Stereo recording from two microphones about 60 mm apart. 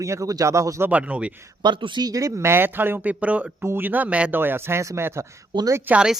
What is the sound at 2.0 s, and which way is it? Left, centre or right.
Speech, right.